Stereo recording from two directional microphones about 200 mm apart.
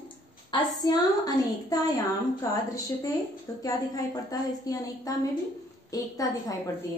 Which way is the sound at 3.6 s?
20° left (ahead or behind).